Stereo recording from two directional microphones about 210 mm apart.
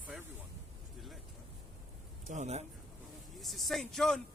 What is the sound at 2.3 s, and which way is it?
Speech, 35° right (ahead or behind).